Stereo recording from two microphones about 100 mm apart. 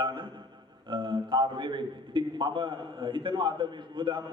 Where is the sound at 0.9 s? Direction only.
55° right (ahead or behind).